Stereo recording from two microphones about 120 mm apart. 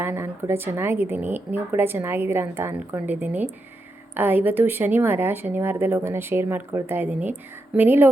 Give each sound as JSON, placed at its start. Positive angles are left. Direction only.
{"t": 0.0, "sound": "speech", "side_deg": -20}